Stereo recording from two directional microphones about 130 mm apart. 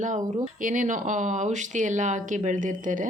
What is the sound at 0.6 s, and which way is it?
Speech, 85° right.